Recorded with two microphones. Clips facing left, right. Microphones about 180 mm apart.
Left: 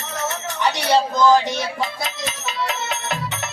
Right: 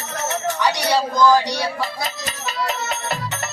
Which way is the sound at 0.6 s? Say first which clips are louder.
Left 3 dB; 25° left (ahead or behind).